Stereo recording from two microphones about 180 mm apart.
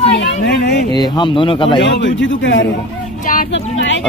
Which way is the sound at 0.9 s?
25° left (ahead or behind).